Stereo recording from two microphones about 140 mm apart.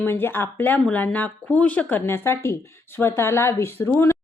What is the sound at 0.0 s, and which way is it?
Speech, 15° left (ahead or behind).